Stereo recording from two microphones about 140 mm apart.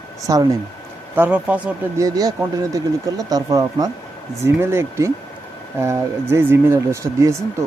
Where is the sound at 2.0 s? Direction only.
25° right (ahead or behind).